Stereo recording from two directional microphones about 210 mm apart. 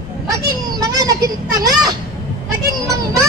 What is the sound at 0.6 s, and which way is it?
Speech, 15° right (ahead or behind).